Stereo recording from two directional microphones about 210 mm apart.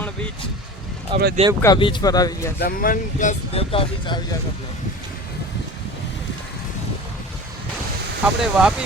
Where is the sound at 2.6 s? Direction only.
45° left (ahead or behind); by 4.2 s 25° left (ahead or behind).